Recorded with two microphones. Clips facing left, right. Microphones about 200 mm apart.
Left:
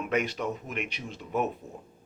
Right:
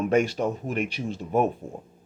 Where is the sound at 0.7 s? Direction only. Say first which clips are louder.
Right 8 dB; 35° right (ahead or behind).